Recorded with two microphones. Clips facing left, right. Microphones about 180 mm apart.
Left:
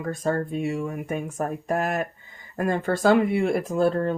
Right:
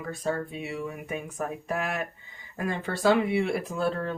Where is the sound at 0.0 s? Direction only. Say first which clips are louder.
Left 5 dB; 45° left (ahead or behind).